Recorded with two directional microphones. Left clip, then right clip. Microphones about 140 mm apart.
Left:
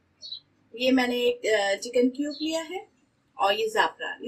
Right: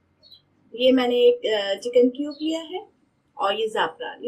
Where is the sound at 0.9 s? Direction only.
Centre (ahead or behind).